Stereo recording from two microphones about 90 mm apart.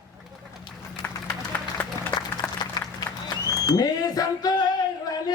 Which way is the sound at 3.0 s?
45° left (ahead or behind).